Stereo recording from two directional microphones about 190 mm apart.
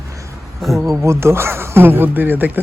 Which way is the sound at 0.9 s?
15° right (ahead or behind).